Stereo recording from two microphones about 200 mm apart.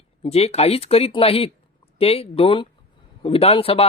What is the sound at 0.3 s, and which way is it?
Speech, 30° left (ahead or behind).